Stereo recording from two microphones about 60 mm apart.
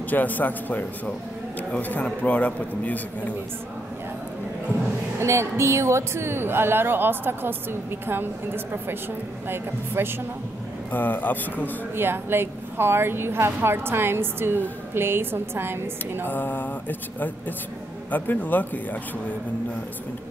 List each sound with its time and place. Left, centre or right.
0.1 s a man's voice: left
5.2 s a woman's voice: right
9.5 s a woman's voice: right
10.9 s mantra: left
11.9 s a woman's voice: right
16.3 s mantra: left
18.1 s a man's voice: left